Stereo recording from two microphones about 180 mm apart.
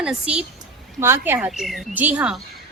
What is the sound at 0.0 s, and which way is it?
Speech, 5° right (ahead or behind).